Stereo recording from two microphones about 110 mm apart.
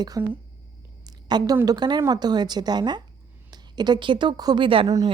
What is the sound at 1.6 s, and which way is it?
A woman's voice, 35° right (ahead or behind).